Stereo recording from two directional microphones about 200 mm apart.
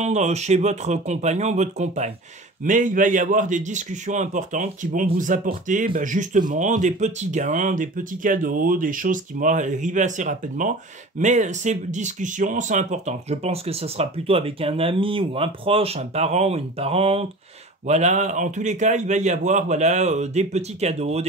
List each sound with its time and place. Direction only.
0.0 s a man's voice: 35° right (ahead or behind)